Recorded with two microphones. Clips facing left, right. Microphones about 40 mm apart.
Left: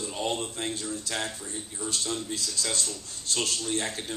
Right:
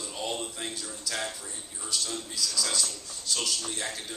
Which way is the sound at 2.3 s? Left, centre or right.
Left.